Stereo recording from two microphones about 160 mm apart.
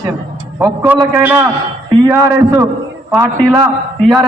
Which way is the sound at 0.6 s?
10° right (ahead or behind).